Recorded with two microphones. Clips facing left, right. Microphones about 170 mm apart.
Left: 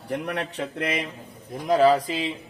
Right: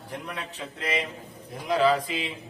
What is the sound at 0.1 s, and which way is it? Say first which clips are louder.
Speech: left 8 dB; 70° left (ahead or behind).